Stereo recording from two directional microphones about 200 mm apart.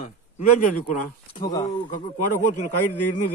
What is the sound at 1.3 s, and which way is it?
Speech, 20° left (ahead or behind).